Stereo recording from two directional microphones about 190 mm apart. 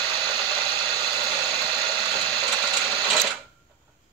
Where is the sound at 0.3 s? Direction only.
25° right (ahead or behind).